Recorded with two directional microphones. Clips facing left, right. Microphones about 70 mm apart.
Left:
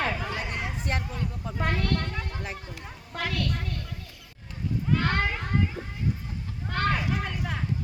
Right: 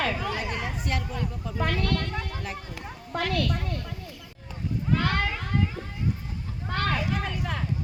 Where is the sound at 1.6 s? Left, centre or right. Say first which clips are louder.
Right 1 dB; centre.